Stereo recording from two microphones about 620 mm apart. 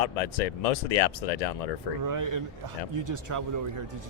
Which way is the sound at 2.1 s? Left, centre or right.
Right.